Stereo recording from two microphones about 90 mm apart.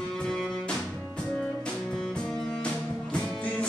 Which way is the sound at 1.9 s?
10° left (ahead or behind).